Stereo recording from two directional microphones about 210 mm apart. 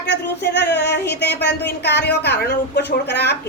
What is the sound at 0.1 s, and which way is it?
Speech, 55° left (ahead or behind).